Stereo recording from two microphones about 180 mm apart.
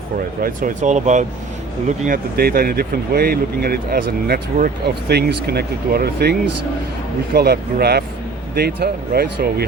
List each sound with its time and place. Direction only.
0.4 s speech: 45° right (ahead or behind)
1.9 s speech: 50° right (ahead or behind)